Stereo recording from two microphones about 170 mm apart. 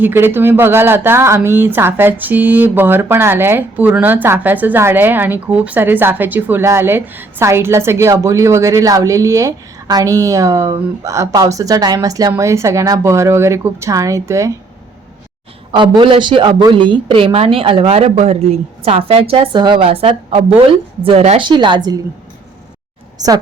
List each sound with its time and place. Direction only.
0.0 s a woman's voice: 15° right (ahead or behind)
15.7 s a woman's voice: 30° right (ahead or behind)